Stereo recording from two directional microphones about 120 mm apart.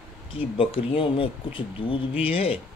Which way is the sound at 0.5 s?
50° left (ahead or behind).